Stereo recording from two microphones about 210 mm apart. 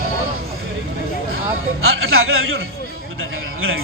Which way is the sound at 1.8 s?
75° right (ahead or behind).